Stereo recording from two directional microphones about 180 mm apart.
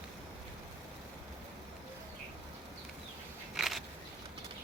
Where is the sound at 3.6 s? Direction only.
Centre (ahead or behind).